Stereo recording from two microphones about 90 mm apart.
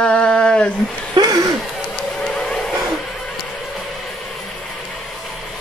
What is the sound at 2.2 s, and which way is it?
Vehicle, 10° left (ahead or behind).